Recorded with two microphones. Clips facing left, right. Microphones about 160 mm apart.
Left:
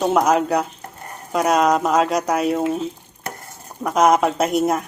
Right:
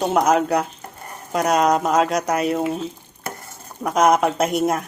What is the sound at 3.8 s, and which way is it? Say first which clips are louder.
Speech: left 1 dB; centre (ahead or behind).